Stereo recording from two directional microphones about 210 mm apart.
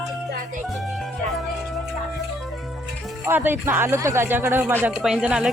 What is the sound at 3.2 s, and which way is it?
Speech, 10° right (ahead or behind).